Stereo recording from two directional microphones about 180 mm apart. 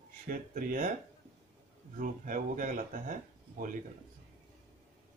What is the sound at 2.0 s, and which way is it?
Speech, 50° right (ahead or behind).